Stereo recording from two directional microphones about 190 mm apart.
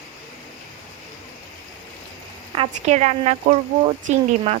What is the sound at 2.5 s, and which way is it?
Speech, 35° right (ahead or behind).